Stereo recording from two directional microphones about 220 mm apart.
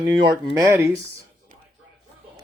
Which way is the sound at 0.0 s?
20° right (ahead or behind).